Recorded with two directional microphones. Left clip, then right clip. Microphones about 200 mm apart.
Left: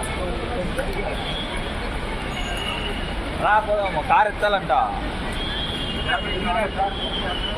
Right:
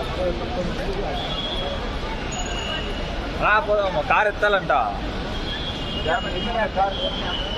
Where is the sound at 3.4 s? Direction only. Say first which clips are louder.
Even; 25° right (ahead or behind).